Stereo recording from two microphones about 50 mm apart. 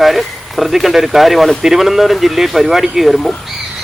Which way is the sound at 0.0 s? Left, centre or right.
Centre.